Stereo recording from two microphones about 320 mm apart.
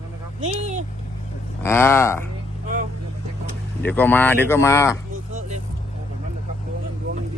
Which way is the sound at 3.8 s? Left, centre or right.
Centre.